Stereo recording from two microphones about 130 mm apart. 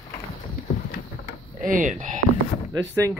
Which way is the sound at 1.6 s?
85° right.